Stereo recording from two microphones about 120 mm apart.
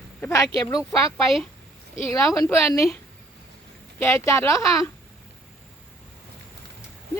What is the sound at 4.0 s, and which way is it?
Speech, 25° left (ahead or behind).